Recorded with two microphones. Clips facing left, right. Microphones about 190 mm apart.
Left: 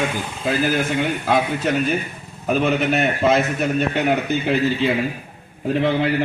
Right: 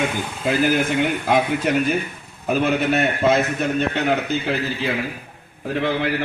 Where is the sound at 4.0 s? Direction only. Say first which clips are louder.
Left 1 dB; 15° left (ahead or behind).